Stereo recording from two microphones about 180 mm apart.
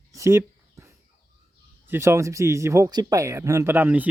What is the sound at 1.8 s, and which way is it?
Speech, 15° right (ahead or behind).